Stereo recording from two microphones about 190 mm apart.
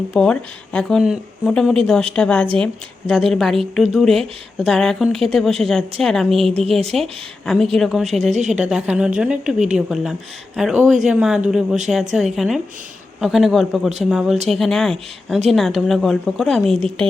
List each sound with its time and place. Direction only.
0.1 s a woman's voice: 5° left (ahead or behind)
6.7 s speech: 35° right (ahead or behind)
6.9 s a woman's voice: centre (ahead or behind)
8.2 s speech: 40° right (ahead or behind)
8.7 s a woman's voice: 5° right (ahead or behind)